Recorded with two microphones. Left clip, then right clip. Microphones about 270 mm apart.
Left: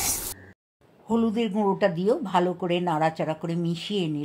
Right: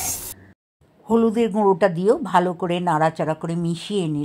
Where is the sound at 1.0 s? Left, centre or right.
Right.